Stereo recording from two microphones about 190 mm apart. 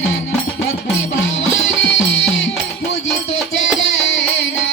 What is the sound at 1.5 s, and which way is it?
Music, 80° left.